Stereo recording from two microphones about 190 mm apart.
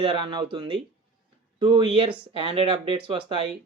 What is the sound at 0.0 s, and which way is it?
Speech, 25° right (ahead or behind).